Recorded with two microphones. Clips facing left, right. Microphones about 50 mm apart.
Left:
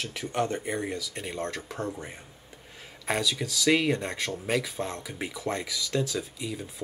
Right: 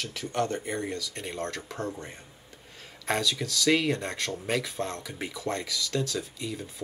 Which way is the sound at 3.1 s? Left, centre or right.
Centre.